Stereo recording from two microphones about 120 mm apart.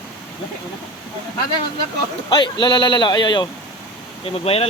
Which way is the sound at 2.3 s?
40° left (ahead or behind).